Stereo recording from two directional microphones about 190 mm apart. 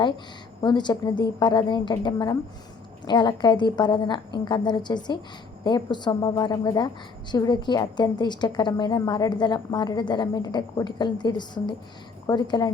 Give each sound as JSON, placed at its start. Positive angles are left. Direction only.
{"t": 0.6, "sound": "a woman's voice", "side_deg": 25}